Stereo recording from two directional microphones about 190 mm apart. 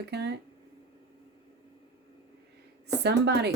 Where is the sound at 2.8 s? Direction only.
60° right (ahead or behind).